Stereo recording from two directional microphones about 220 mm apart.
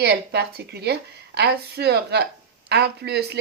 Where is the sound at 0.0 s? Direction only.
45° right (ahead or behind).